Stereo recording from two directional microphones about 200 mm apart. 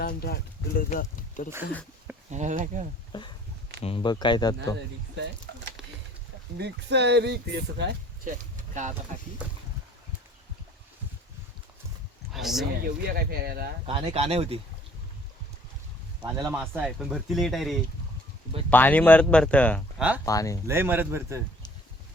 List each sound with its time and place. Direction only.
0.0 s speech: 50° left (ahead or behind)
2.3 s speech: 35° right (ahead or behind)
3.1 s speech: 25° left (ahead or behind)
6.6 s speech: 60° right (ahead or behind)
8.2 s speech: 40° right (ahead or behind)
12.3 s a sound: centre (ahead or behind)
12.8 s speech: 50° right (ahead or behind)
13.8 s speech: 30° right (ahead or behind)
16.2 s speech: 15° right (ahead or behind)
16.6 s speech: centre (ahead or behind)
20.0 s speech: 5° right (ahead or behind)
20.2 s speech: 15° left (ahead or behind)
20.7 s speech: 10° right (ahead or behind)